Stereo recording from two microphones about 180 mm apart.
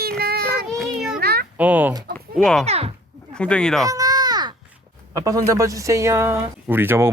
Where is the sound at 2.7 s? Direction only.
35° right (ahead or behind).